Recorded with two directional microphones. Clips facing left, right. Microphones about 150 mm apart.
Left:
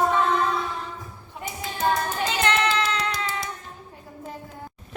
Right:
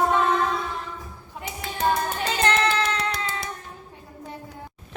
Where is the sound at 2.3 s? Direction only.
35° right (ahead or behind).